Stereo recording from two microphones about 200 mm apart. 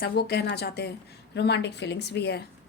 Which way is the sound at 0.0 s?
55° left (ahead or behind).